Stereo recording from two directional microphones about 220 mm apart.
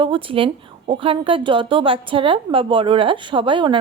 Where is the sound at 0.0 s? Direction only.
25° right (ahead or behind).